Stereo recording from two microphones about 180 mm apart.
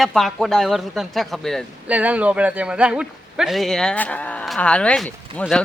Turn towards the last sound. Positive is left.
turn(degrees=5)  # may be behind; listen again after turning